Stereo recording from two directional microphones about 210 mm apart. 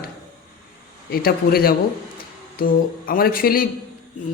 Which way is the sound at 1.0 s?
45° left (ahead or behind).